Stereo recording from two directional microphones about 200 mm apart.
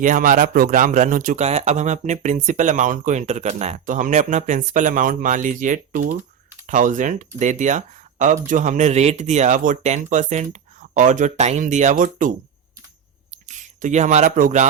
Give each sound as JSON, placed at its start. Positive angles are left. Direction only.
{"t": 0.0, "sound": "speech", "side_deg": -40}
{"t": 13.5, "sound": "speech", "side_deg": -35}